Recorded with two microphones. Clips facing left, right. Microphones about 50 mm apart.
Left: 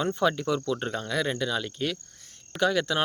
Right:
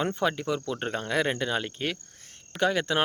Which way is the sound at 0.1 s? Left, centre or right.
Right.